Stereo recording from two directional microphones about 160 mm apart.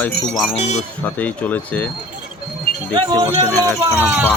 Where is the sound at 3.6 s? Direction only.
15° left (ahead or behind).